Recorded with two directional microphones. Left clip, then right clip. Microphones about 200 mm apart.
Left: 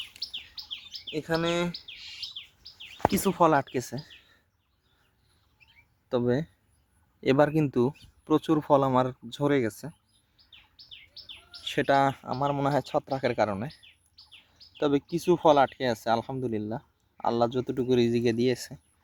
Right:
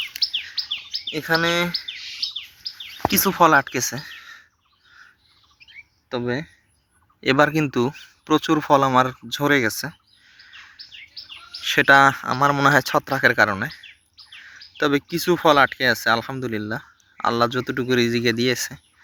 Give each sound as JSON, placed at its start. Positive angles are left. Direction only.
{"t": 0.6, "sound": "chirp", "side_deg": 20}
{"t": 1.4, "sound": "speech", "side_deg": 0}
{"t": 3.1, "sound": "speech", "side_deg": 10}
{"t": 6.1, "sound": "speech", "side_deg": 25}
{"t": 7.2, "sound": "speech", "side_deg": 10}
{"t": 11.6, "sound": "speech", "side_deg": 5}
{"t": 14.8, "sound": "speech", "side_deg": 0}